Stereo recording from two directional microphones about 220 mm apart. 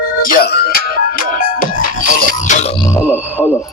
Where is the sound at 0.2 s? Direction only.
40° left (ahead or behind).